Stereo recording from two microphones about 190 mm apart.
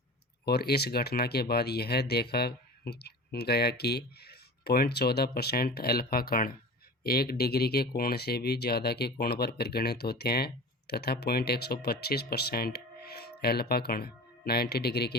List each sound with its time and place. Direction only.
0.4 s speech: 60° left (ahead or behind)